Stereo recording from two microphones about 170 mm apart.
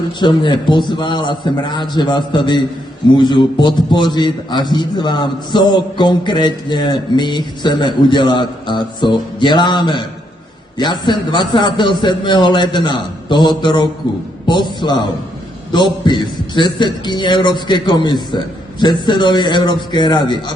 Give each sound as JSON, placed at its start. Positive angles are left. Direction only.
{"t": 0.2, "sound": "a man's voice", "side_deg": 25}